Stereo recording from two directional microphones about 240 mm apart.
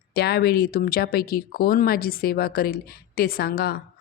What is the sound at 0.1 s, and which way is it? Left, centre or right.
A woman's voice, left.